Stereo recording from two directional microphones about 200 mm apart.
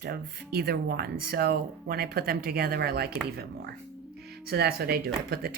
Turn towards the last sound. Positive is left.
turn(degrees=-50)  # may be behind; listen again after turning